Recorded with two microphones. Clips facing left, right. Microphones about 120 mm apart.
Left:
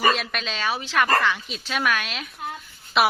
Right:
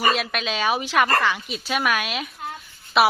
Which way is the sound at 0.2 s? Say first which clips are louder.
Right 4 dB; 5° right (ahead or behind).